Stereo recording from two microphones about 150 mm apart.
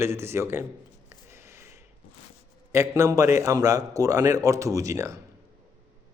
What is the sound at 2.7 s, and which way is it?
A man's voice, 20° right (ahead or behind).